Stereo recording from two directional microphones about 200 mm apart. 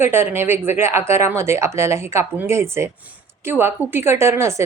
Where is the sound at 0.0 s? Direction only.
10° right (ahead or behind).